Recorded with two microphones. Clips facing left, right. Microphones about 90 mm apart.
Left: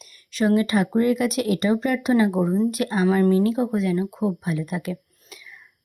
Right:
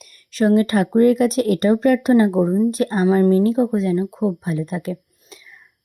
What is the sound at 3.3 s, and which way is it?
A woman's voice, 35° right (ahead or behind).